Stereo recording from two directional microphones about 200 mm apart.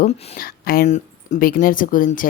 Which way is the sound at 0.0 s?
30° left (ahead or behind).